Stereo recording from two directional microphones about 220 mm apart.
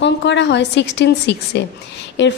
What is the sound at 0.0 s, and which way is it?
A woman's voice, 50° left (ahead or behind).